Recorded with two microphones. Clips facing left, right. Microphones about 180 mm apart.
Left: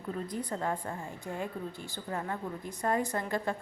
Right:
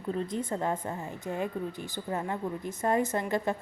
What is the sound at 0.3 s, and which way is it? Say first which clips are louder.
A woman's voice: right 3 dB; 25° right (ahead or behind).